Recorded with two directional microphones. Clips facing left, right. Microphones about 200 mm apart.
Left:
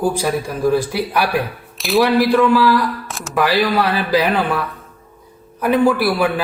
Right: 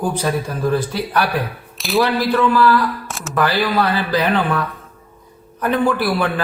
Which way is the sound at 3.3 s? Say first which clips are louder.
Left 1 dB; 10° left (ahead or behind).